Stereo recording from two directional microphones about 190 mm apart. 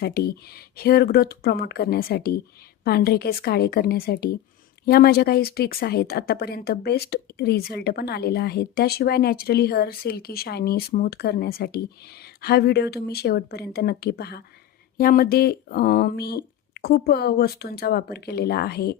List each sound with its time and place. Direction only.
0.0 s a woman's voice: 55° left (ahead or behind)